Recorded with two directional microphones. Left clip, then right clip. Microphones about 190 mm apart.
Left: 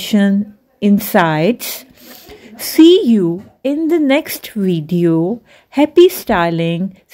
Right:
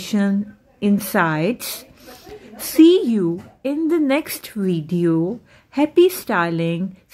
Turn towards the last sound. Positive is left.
turn(degrees=30)  # may be behind; listen again after turning